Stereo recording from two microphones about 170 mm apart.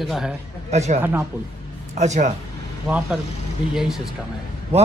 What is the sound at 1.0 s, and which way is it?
Speech, 10° right (ahead or behind).